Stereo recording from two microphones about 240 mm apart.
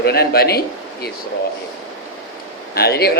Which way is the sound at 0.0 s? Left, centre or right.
Left.